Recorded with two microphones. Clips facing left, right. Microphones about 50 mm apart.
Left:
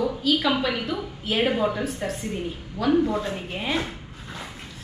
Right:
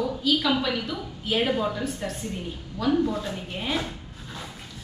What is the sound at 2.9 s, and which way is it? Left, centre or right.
Speech, centre.